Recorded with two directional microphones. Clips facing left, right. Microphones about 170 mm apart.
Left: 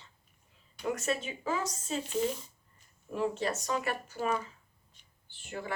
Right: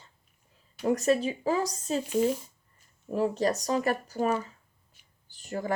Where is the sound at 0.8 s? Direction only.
35° right (ahead or behind).